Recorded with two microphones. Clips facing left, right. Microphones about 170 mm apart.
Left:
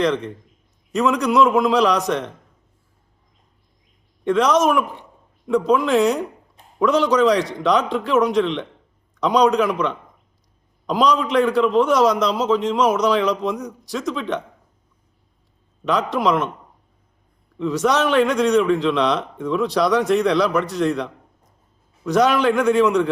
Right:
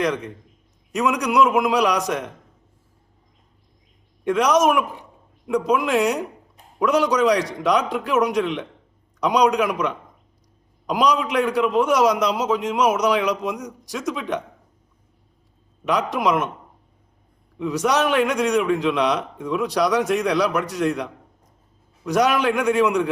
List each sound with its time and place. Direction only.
0.9 s a man's voice: 10° right (ahead or behind)
4.2 s a man's voice: 10° right (ahead or behind)
15.9 s a man's voice: 10° right (ahead or behind)
17.6 s a man's voice: 10° right (ahead or behind)